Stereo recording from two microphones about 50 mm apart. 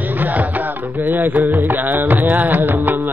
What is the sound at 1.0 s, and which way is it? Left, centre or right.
Music, right.